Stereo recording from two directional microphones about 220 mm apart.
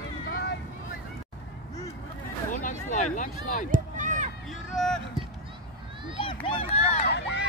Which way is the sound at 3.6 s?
35° right (ahead or behind).